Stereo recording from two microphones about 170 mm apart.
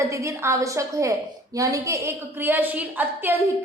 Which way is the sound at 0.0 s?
20° right (ahead or behind).